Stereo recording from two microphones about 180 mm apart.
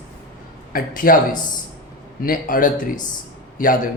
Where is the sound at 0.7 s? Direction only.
50° left (ahead or behind).